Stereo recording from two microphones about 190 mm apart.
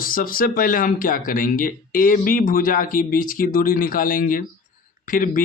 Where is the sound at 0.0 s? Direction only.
50° left (ahead or behind).